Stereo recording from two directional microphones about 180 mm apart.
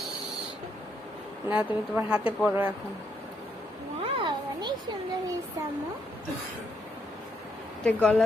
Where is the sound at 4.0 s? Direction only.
25° right (ahead or behind).